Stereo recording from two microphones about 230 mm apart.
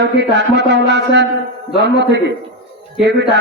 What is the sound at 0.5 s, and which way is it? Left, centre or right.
A man's voice, right.